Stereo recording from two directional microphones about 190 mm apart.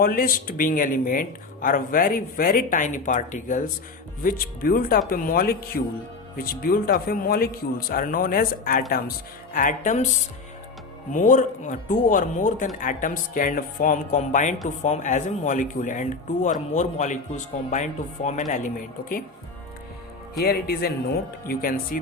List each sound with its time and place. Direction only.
0.0 s speech: 50° left (ahead or behind)
11.1 s speech: 45° left (ahead or behind)
20.4 s speech: 55° left (ahead or behind)